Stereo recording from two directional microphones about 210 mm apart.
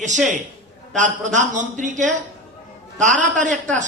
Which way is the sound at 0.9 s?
35° right (ahead or behind).